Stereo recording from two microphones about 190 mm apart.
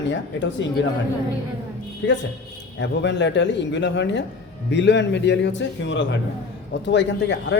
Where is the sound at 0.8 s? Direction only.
70° left (ahead or behind).